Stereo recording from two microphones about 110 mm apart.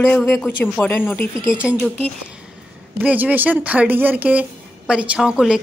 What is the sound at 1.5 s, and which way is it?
Speech, 10° right (ahead or behind).